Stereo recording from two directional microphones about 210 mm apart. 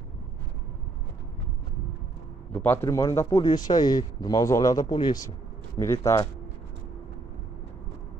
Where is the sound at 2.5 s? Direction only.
10° left (ahead or behind).